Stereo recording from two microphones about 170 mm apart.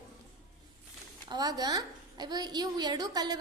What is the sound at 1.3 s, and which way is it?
A woman's voice, 25° right (ahead or behind).